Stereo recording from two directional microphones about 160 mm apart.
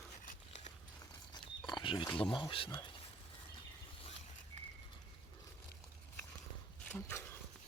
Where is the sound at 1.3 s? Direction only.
30° left (ahead or behind).